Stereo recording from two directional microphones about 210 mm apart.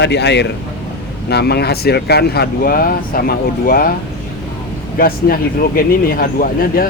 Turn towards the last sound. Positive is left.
turn(degrees=45)  # may be behind; listen again after turning